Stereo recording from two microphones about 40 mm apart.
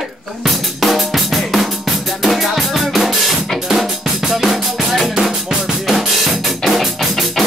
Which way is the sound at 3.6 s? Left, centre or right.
Centre.